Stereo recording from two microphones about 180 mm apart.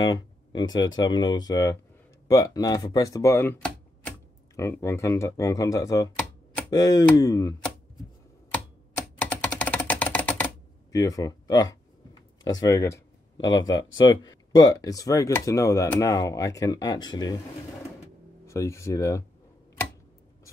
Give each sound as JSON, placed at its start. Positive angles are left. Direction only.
{"t": 0.0, "sound": "speech", "side_deg": 25}
{"t": 9.2, "sound": "typing", "side_deg": 10}
{"t": 10.9, "sound": "a sound", "side_deg": 20}
{"t": 12.5, "sound": "speech", "side_deg": 15}
{"t": 18.5, "sound": "speech", "side_deg": 15}